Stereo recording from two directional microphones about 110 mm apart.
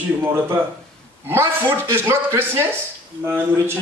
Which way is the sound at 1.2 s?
20° right (ahead or behind).